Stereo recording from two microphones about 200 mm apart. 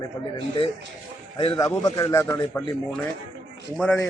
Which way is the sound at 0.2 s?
20° left (ahead or behind).